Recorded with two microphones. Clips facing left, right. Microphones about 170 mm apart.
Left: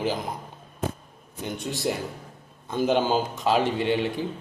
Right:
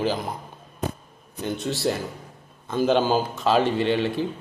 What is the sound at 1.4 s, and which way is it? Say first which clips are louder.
A man's voice: right 4 dB; 15° left (ahead or behind).